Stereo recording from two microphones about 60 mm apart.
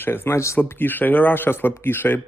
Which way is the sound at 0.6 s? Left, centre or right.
Left.